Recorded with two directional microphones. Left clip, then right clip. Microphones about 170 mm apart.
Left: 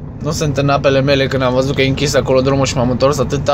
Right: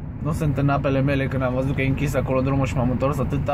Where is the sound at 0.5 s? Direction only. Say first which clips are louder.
Left 10 dB; 10° left (ahead or behind).